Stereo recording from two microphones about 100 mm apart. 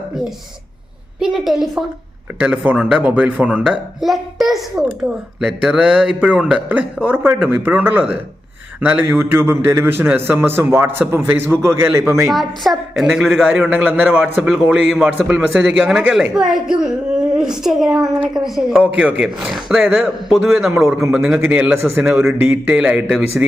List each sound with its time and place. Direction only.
1.2 s a woman's voice: 5° right (ahead or behind); by 12.1 s 25° right (ahead or behind)
12.3 s a man's voice: centre (ahead or behind); by 22.0 s 20° right (ahead or behind)
22.0 s a woman's voice: 5° right (ahead or behind)